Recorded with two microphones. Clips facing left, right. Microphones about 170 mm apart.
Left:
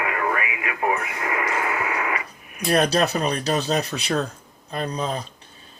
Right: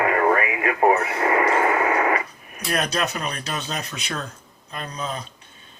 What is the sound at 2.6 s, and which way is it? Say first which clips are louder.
Speech: left 5 dB; 35° left (ahead or behind).